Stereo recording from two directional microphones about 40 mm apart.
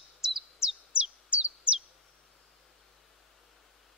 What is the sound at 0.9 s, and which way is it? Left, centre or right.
Bird, right.